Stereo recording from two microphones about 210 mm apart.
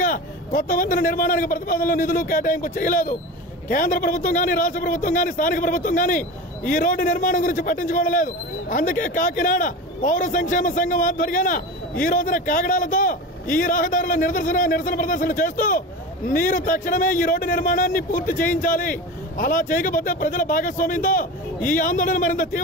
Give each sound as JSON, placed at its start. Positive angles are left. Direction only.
{"t": 0.0, "sound": "a man's voice", "side_deg": 45}